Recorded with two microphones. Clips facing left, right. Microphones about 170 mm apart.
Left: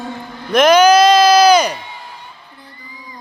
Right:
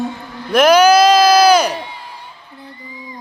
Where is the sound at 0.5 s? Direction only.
5° right (ahead or behind).